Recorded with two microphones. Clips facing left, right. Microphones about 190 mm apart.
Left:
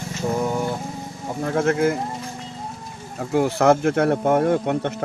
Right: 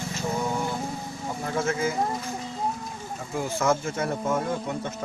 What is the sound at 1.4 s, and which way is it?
Speech, 60° left (ahead or behind).